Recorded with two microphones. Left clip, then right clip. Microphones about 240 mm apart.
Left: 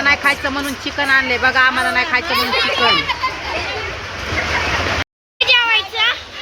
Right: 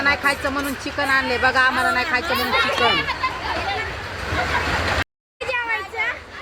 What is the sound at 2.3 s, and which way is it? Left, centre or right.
Speech, left.